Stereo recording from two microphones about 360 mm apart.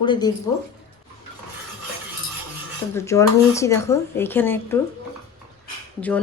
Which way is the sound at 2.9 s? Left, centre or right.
Centre.